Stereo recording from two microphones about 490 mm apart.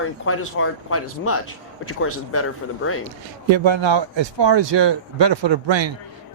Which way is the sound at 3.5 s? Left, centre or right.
Right.